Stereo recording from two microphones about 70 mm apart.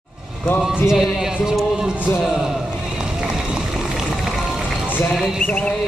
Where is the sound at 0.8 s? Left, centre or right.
Centre.